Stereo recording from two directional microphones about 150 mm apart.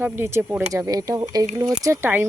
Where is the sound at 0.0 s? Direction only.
15° right (ahead or behind).